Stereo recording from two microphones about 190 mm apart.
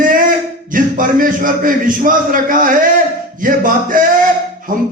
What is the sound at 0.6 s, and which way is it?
A man's voice, 45° right (ahead or behind).